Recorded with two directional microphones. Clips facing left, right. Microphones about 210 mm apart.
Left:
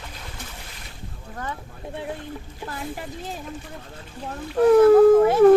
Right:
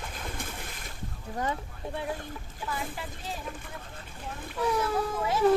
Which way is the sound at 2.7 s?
50° left (ahead or behind).